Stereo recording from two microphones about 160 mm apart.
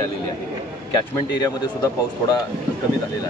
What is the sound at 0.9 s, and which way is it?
Speech, 25° left (ahead or behind).